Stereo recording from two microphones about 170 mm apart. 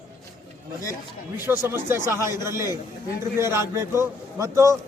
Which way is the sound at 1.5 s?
15° right (ahead or behind).